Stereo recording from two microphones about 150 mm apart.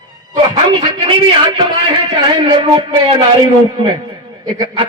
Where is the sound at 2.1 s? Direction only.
35° right (ahead or behind).